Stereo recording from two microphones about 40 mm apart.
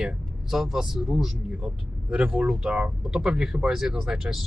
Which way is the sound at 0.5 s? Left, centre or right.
Centre.